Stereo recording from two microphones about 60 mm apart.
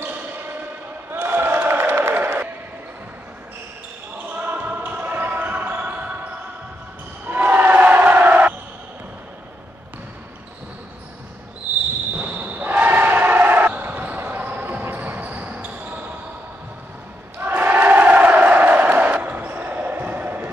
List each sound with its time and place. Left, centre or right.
1.1 s a sound: right
4.3 s basketball bounce: right
7.2 s basketball bounce: right
12.2 s basketball bounce: right
17.4 s crowd: right